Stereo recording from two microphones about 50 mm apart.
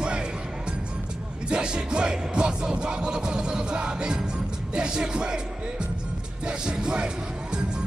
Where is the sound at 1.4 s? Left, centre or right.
Centre.